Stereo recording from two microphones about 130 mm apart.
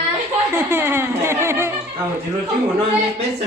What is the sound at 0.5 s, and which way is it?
Speech, 15° right (ahead or behind).